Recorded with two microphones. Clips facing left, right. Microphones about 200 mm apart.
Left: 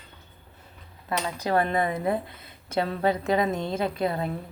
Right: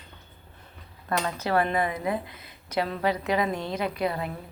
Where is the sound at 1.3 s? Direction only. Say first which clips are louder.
Left 2 dB; 15° left (ahead or behind).